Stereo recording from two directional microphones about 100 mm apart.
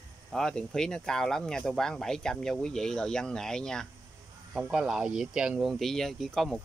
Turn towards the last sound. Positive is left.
turn(degrees=5)  # may be behind; listen again after turning